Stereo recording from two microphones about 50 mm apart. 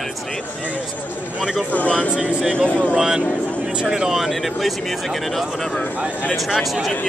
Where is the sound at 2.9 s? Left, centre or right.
Centre.